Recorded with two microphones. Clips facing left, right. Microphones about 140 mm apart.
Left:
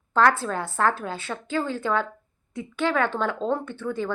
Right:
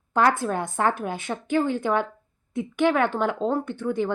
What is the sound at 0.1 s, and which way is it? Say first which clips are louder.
Speech: even; 15° right (ahead or behind).